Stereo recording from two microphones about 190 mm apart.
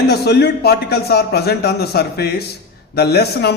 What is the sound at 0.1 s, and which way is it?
A man's voice, 60° left (ahead or behind).